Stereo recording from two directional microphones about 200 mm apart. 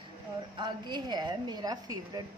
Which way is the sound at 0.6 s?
20° right (ahead or behind).